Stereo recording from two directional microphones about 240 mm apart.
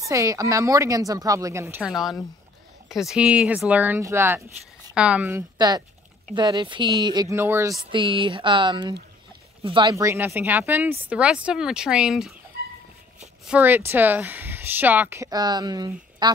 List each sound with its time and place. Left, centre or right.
0.0 s speech: centre
7.9 s speech: right; by 12.4 s centre
13.5 s speech: centre